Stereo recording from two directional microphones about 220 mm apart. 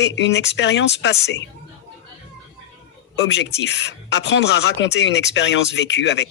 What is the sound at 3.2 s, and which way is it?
Speech, 55° left (ahead or behind).